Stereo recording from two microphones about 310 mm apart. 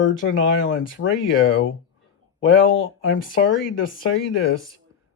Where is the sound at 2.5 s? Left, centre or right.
Left.